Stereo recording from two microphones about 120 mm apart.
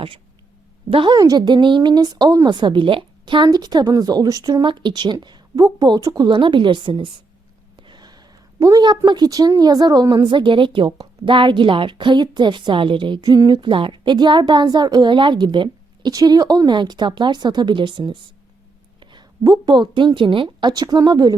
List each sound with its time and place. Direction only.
0.9 s a woman's voice: 50° right (ahead or behind)
1.1 s speech: 35° right (ahead or behind)
7.8 s a sound: 40° right (ahead or behind)
9.0 s a woman's voice: 35° right (ahead or behind)